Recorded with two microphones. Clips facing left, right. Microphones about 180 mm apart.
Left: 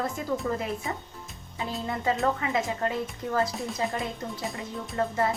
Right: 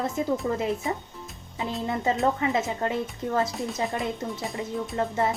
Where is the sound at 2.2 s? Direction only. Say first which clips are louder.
Right 2 dB; 25° right (ahead or behind).